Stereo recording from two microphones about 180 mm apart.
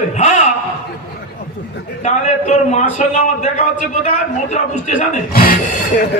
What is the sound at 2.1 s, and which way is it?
A man's voice, 40° left (ahead or behind).